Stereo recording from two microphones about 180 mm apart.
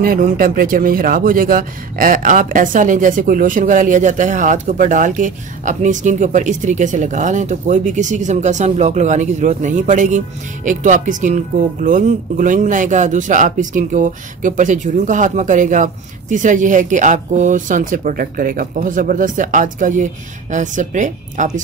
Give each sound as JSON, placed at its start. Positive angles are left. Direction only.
{"t": 0.0, "sound": "speech", "side_deg": -50}